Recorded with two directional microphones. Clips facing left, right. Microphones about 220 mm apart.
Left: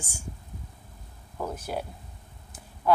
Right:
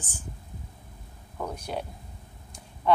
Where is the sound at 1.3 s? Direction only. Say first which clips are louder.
Left 1 dB; 5° left (ahead or behind).